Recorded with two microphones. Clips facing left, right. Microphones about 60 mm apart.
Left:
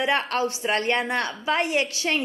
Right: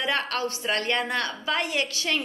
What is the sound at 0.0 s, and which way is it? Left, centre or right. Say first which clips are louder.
A woman's voice: left 4 dB; left.